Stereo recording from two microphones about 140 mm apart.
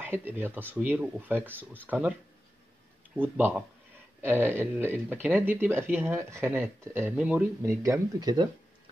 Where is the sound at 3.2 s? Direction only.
15° right (ahead or behind).